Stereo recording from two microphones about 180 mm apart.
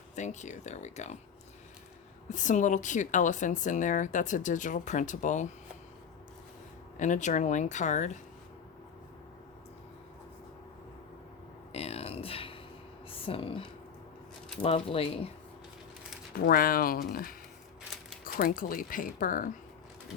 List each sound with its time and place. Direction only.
0.2 s speech: 40° left (ahead or behind)
2.3 s speech: 45° left (ahead or behind)
6.9 s speech: 45° left (ahead or behind)
11.7 s a sound: 35° left (ahead or behind)
14.6 s speech: 35° left (ahead or behind)
16.3 s speech: 55° left (ahead or behind)
18.3 s speech: 50° left (ahead or behind)